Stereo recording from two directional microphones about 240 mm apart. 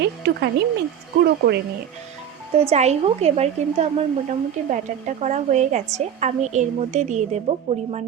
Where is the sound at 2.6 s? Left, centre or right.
Right.